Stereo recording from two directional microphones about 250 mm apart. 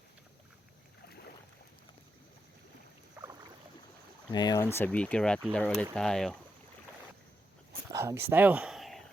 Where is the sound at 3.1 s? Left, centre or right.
Centre.